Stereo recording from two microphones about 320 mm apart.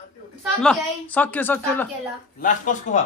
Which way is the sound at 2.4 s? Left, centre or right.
Left.